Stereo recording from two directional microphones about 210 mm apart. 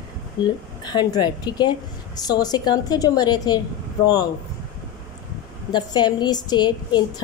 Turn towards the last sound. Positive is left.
turn(degrees=20)  # may be behind; listen again after turning